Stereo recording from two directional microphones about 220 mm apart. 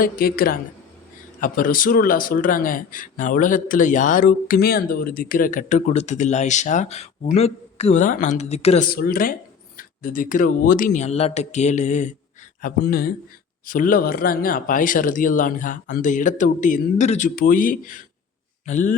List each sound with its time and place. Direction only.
0.0 s speech: 40° left (ahead or behind)
8.9 s speech: 40° left (ahead or behind)